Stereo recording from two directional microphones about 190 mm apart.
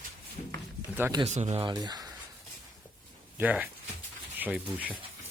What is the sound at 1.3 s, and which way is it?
Speech, 35° right (ahead or behind).